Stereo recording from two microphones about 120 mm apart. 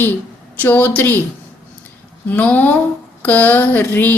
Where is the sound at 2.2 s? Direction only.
15° left (ahead or behind).